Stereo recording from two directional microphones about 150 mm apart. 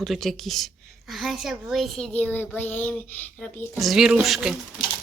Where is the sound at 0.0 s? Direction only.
Centre (ahead or behind).